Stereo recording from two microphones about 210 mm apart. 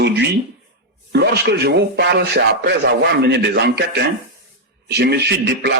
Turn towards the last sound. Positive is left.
turn(degrees=-50)  # may be behind; listen again after turning